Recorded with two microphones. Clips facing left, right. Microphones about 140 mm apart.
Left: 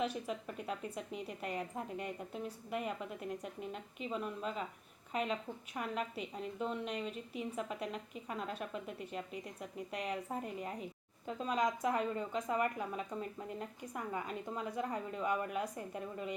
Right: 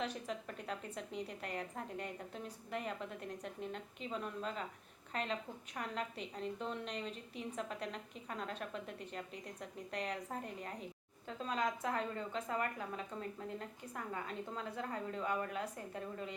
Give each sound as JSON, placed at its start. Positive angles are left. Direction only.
{"t": 0.0, "sound": "a woman's voice", "side_deg": 10}